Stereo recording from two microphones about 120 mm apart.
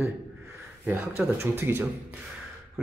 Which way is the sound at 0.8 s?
20° right (ahead or behind).